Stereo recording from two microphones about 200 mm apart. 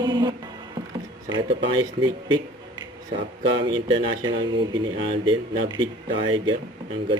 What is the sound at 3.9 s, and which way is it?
Speech, 25° right (ahead or behind).